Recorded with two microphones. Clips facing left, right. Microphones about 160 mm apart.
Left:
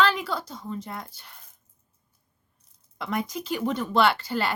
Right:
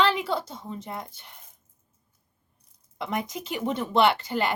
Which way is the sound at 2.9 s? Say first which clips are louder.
Left 1 dB; 20° right (ahead or behind).